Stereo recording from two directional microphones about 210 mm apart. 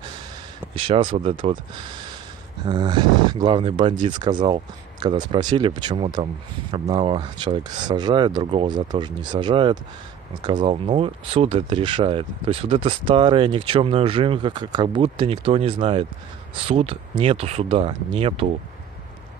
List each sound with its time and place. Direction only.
0.7 s speech: 25° right (ahead or behind)